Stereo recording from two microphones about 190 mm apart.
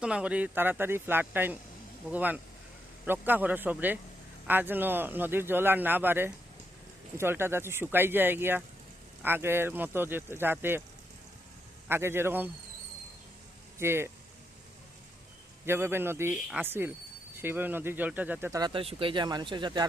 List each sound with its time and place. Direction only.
0.0 s a man's voice: 5° right (ahead or behind)
11.9 s a man's voice: 10° right (ahead or behind)
13.7 s a man's voice: 15° right (ahead or behind)
15.6 s a man's voice: 10° right (ahead or behind)